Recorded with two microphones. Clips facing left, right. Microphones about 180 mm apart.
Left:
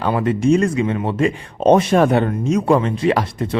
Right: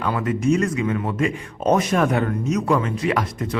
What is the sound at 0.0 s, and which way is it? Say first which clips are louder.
Speech: left 4 dB; 30° left (ahead or behind).